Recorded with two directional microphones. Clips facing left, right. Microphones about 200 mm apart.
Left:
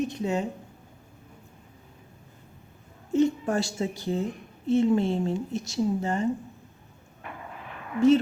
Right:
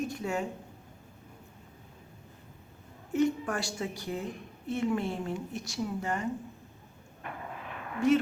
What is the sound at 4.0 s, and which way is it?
Speech, 25° left (ahead or behind).